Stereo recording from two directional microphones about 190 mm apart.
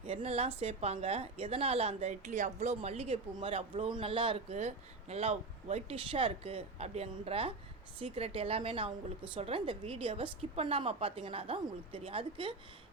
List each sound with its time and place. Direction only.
0.0 s a woman's voice: 30° right (ahead or behind)